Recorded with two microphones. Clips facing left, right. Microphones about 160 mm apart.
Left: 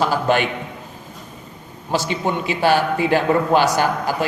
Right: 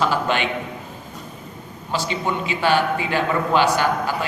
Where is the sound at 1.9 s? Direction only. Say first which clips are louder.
Left 3 dB; 45° left (ahead or behind).